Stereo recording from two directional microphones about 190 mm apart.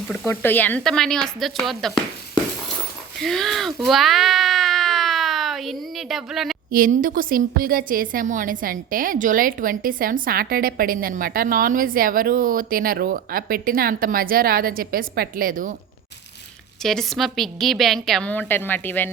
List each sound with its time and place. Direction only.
0.1 s a woman's voice: 10° left (ahead or behind)
3.2 s a sound: centre (ahead or behind)
6.7 s a woman's voice: 50° right (ahead or behind)
16.8 s a woman's voice: centre (ahead or behind)